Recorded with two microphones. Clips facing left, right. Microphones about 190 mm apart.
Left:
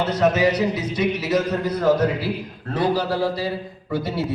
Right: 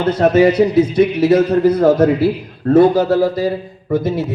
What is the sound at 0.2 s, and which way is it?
A man's voice, 55° right (ahead or behind).